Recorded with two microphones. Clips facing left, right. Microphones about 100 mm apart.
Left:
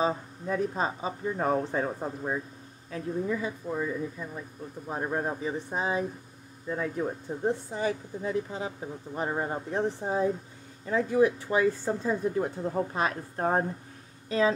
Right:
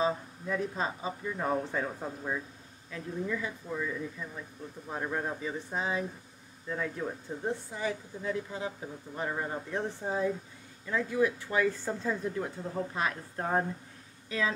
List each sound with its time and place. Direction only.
0.0 s speech: 30° left (ahead or behind)
8.2 s speech: 25° left (ahead or behind)